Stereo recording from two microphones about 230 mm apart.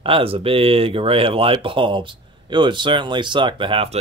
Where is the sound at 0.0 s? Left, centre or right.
Right.